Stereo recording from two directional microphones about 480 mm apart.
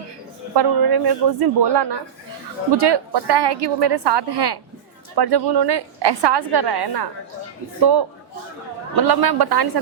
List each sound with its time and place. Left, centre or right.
0.5 s a woman's voice: right
9.0 s a woman's voice: right